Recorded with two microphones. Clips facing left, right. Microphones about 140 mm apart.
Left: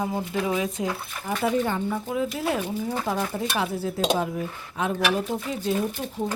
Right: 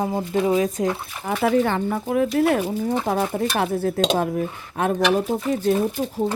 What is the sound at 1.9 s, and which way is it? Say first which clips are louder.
Speech: right 6 dB; 55° right (ahead or behind).